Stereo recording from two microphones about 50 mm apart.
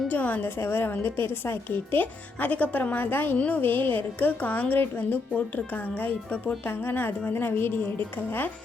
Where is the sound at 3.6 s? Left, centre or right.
Left.